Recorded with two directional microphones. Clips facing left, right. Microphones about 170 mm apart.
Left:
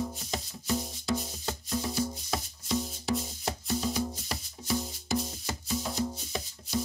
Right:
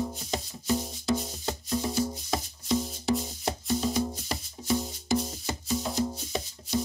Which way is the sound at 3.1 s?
Centre (ahead or behind).